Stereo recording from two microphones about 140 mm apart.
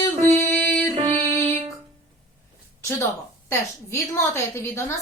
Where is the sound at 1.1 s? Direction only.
55° right (ahead or behind).